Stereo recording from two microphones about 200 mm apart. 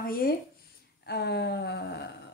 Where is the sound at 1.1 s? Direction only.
55° left (ahead or behind).